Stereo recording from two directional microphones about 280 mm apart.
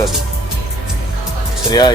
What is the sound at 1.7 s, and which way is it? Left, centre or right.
Speech, centre.